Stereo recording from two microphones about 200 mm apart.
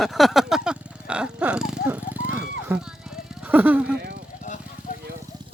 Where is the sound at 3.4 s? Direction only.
10° right (ahead or behind).